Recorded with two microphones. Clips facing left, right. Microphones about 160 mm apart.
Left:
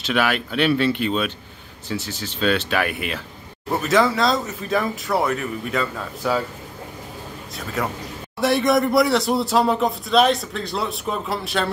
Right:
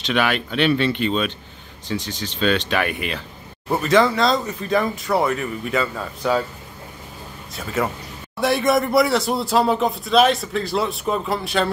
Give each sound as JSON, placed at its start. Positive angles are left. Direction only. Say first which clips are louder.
{"t": 0.0, "sound": "speech", "louder": "even", "side_deg": 5}
{"t": 7.5, "sound": "speech", "louder": "right 3 dB", "side_deg": 0}